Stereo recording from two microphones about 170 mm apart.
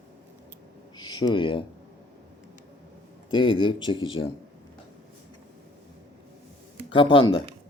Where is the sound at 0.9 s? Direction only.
25° left (ahead or behind).